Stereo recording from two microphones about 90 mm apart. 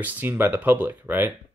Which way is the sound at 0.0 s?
20° right (ahead or behind).